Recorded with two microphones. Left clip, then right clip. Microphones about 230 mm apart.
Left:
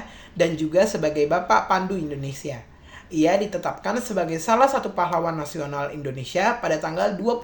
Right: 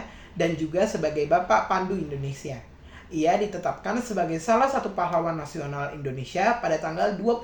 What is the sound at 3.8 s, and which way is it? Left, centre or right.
Speech, left.